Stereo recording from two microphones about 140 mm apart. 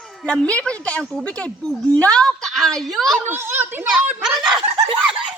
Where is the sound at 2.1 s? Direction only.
5° left (ahead or behind).